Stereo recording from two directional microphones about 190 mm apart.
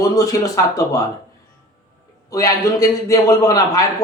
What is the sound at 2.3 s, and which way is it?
Speech, 15° left (ahead or behind).